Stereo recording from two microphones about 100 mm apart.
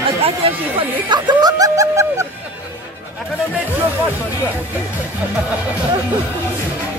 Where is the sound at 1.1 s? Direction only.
45° right (ahead or behind).